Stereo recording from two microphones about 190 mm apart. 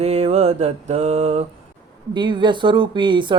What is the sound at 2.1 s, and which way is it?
Speech, 25° right (ahead or behind).